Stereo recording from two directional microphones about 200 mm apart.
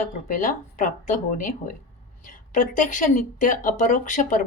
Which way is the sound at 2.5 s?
40° left (ahead or behind).